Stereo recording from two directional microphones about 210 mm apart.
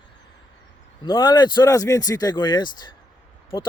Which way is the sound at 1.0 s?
20° left (ahead or behind).